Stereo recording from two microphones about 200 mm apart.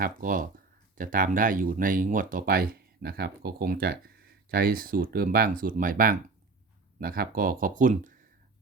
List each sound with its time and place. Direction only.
0.0 s speech: 45° right (ahead or behind)